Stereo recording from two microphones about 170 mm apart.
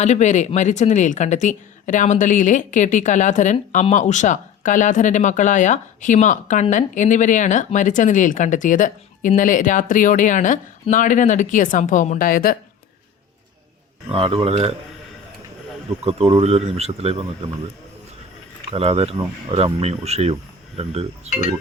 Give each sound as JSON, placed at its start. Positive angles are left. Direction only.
{"t": 0.0, "sound": "speech", "side_deg": 45}
{"t": 14.1, "sound": "speech", "side_deg": -30}
{"t": 16.0, "sound": "speech", "side_deg": -35}
{"t": 18.7, "sound": "speech", "side_deg": -35}